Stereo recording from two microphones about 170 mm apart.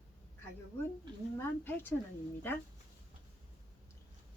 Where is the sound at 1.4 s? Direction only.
10° left (ahead or behind).